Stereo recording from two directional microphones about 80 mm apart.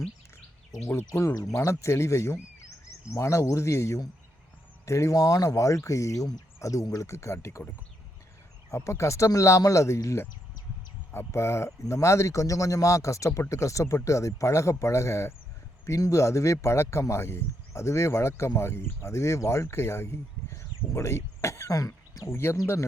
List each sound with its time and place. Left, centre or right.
0.9 s speech: left
8.7 s speech: left